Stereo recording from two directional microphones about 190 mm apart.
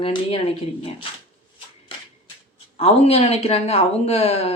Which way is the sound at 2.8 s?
30° left (ahead or behind).